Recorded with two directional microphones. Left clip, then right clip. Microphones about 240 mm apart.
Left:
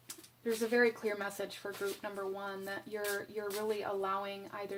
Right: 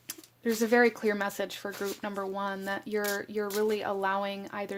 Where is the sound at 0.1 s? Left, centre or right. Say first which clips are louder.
Right 5 dB; right.